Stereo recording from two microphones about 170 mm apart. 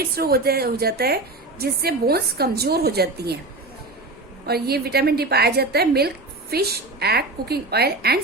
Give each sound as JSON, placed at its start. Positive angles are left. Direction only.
{"t": 0.2, "sound": "a woman's voice", "side_deg": -65}
{"t": 4.4, "sound": "a woman's voice", "side_deg": -70}